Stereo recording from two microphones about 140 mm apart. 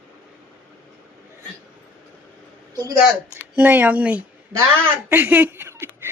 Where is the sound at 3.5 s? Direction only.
10° right (ahead or behind).